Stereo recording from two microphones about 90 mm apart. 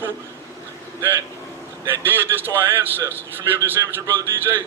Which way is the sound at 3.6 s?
25° right (ahead or behind).